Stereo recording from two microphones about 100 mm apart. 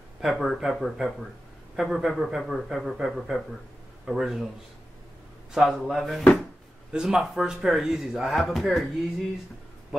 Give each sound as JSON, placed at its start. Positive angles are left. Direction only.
{"t": 0.2, "sound": "speech", "side_deg": 0}
{"t": 5.5, "sound": "speech", "side_deg": 0}